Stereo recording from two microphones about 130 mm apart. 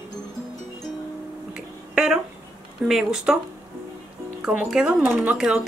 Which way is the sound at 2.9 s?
5° right (ahead or behind).